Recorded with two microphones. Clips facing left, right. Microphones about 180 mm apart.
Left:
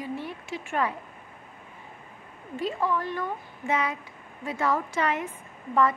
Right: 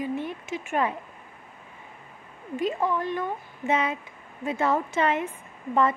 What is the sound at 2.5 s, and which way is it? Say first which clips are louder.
Speech: right 2 dB; 20° right (ahead or behind).